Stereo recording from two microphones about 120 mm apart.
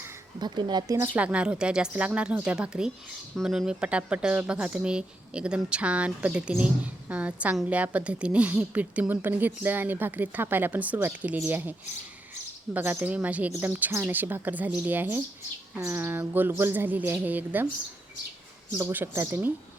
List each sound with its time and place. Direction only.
0.3 s speech: 40° right (ahead or behind)
0.9 s speech: 15° right (ahead or behind)
12.7 s speech: 15° right (ahead or behind)
18.9 s speech: 20° right (ahead or behind)